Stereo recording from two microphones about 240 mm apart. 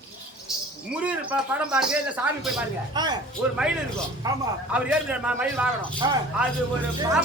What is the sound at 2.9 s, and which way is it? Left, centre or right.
Speech, centre.